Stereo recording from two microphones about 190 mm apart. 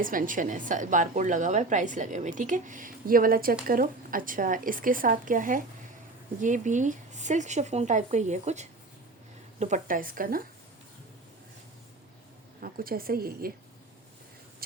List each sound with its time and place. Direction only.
0.0 s a woman's voice: 45° right (ahead or behind)
12.5 s speech: 50° right (ahead or behind)